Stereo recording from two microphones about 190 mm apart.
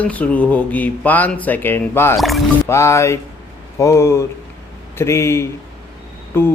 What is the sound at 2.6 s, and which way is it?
Speech, 15° left (ahead or behind).